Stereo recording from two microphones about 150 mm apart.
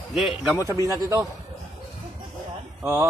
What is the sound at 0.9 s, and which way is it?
Speech, 20° right (ahead or behind).